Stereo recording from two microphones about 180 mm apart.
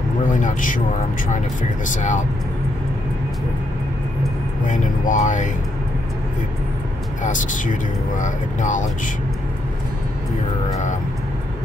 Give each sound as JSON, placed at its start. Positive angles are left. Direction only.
{"t": 0.3, "sound": "speech", "side_deg": 45}
{"t": 4.6, "sound": "speech", "side_deg": 45}
{"t": 7.2, "sound": "speech", "side_deg": 45}